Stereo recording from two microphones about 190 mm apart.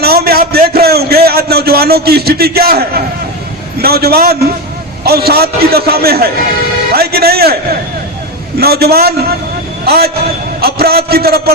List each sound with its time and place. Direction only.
0.0 s a sound: 55° right (ahead or behind)
3.8 s a man's voice: 55° right (ahead or behind)
6.9 s music: 55° right (ahead or behind)
8.5 s a man's voice: 55° right (ahead or behind)